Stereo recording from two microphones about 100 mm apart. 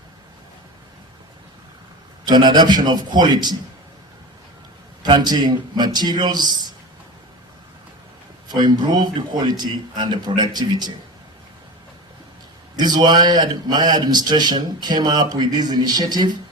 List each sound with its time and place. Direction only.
2.2 s a man's voice: 45° right (ahead or behind)
5.0 s a man's voice: 45° right (ahead or behind)
8.4 s a man's voice: 45° right (ahead or behind)
12.7 s a man's voice: 45° right (ahead or behind)